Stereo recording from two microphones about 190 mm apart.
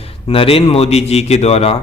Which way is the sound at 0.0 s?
30° left (ahead or behind).